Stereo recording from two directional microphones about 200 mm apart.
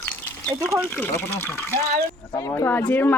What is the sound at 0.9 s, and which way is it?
Speech, 10° left (ahead or behind).